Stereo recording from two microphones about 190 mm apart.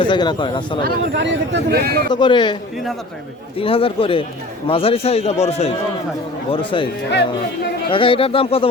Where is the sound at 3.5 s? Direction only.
30° left (ahead or behind).